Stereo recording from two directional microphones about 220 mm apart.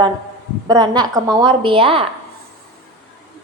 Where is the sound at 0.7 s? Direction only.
20° right (ahead or behind).